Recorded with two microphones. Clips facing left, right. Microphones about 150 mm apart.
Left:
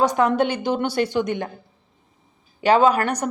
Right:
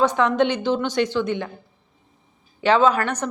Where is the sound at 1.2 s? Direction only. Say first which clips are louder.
Even; 45° left (ahead or behind).